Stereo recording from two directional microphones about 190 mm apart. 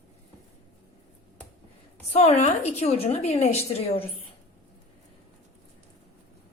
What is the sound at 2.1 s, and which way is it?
Speech, 35° left (ahead or behind).